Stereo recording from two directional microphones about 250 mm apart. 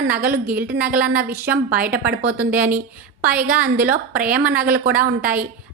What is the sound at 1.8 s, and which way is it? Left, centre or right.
Speech, right.